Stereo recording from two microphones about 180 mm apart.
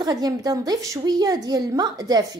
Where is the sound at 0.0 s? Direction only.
20° right (ahead or behind).